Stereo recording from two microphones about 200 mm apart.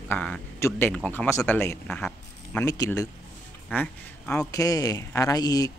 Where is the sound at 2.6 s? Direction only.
15° left (ahead or behind).